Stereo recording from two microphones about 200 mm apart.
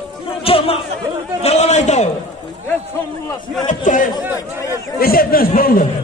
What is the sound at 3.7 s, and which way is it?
A man's voice, 40° left (ahead or behind).